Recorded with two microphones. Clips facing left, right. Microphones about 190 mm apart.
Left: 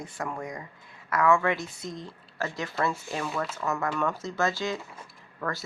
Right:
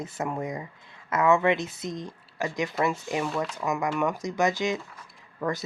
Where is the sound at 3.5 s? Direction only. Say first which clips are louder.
Right 2 dB; 15° right (ahead or behind).